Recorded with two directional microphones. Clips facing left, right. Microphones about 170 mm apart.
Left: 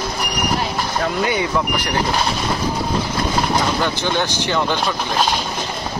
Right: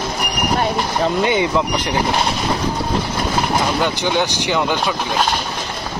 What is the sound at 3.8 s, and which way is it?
Speech, 15° right (ahead or behind).